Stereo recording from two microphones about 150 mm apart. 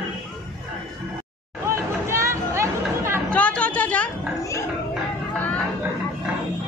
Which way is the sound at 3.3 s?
10° left (ahead or behind).